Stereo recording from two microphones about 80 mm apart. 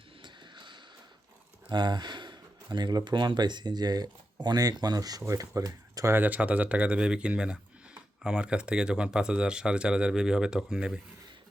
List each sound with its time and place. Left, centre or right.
0.2 s a sound: right
1.7 s speech: right
5.2 s speech: right
6.1 s speech: right